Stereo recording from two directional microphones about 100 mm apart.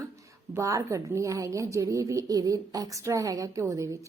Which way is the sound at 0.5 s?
30° right (ahead or behind).